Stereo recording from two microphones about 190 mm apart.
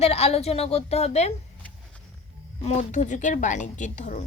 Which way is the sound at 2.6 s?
35° left (ahead or behind).